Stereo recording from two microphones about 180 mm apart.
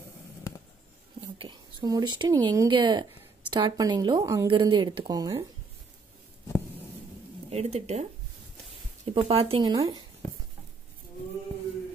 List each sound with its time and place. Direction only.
1.2 s speech: 25° right (ahead or behind)
7.5 s speech: 40° right (ahead or behind)